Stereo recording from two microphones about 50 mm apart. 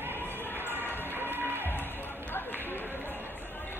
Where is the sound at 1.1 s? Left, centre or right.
Right.